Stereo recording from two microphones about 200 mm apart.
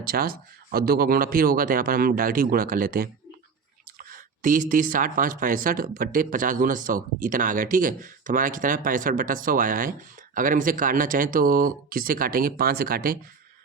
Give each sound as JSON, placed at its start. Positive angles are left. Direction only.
{"t": 0.0, "sound": "speech", "side_deg": -50}